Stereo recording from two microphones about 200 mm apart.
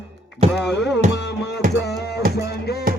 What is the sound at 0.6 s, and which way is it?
Music, 60° left (ahead or behind).